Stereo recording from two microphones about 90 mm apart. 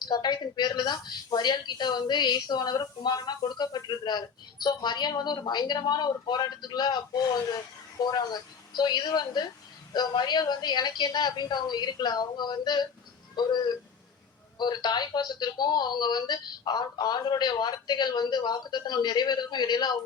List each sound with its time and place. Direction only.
0.0 s speech: 50° left (ahead or behind)